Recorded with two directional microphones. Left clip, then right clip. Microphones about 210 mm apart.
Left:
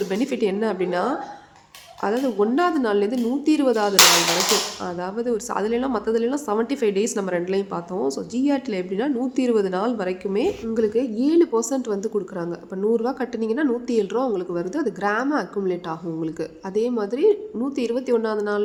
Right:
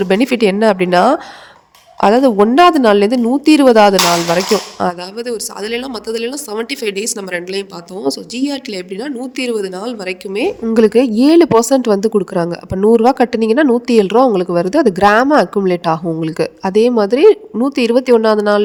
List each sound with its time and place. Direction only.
0.1 s a woman's voice: 45° right (ahead or behind)